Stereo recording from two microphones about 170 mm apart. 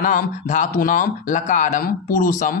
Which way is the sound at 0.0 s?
50° left (ahead or behind).